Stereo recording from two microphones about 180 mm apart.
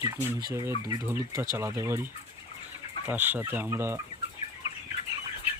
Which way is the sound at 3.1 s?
10° right (ahead or behind).